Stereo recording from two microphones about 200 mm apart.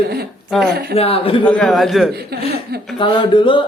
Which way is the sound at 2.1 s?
50° right (ahead or behind).